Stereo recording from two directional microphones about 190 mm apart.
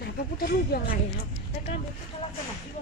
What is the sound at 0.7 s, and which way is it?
Speech, 55° left (ahead or behind).